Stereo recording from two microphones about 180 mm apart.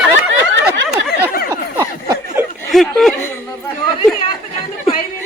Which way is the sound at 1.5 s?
15° right (ahead or behind).